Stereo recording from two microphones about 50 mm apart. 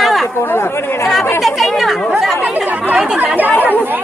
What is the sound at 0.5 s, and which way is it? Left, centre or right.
Speech, left.